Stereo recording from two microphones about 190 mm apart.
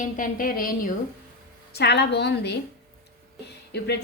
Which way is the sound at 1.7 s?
60° left (ahead or behind).